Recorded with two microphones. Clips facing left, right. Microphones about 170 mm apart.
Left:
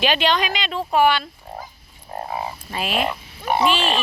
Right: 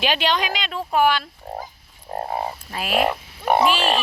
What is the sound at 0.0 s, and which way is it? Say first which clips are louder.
Frog: left 2 dB; 10° right (ahead or behind).